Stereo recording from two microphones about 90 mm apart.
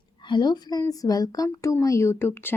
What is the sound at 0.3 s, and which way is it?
A woman's voice, 55° left (ahead or behind).